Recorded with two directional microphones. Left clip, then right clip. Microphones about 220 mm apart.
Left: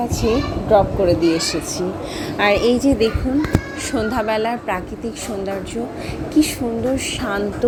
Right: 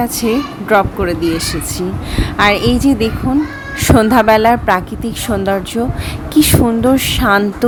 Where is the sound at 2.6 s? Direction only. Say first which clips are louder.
Right 2 dB; 65° right (ahead or behind).